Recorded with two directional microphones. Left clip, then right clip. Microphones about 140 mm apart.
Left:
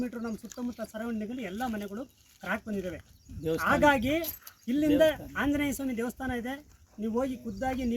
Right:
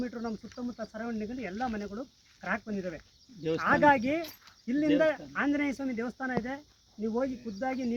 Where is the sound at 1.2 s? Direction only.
20° left (ahead or behind).